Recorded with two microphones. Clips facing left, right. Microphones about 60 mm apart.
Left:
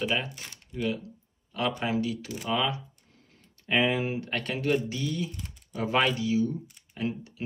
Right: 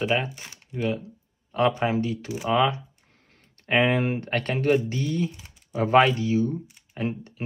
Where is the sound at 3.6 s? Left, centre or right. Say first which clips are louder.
Right 4 dB; right.